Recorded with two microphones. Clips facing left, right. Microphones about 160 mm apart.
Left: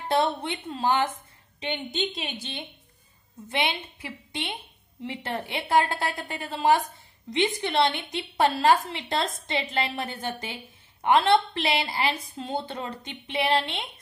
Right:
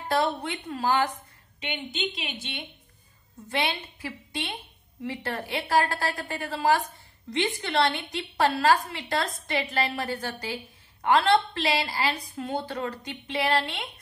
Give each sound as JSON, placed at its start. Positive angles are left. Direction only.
{"t": 0.1, "sound": "a woman's voice", "side_deg": 20}
{"t": 1.6, "sound": "a woman's voice", "side_deg": 35}
{"t": 3.4, "sound": "a woman's voice", "side_deg": 20}